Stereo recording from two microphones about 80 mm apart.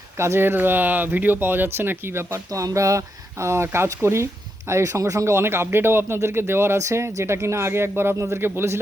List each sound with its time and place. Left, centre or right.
0.2 s speech: right
2.5 s speech: right